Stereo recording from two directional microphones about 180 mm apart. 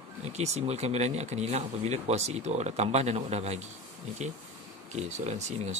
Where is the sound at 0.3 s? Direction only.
35° right (ahead or behind).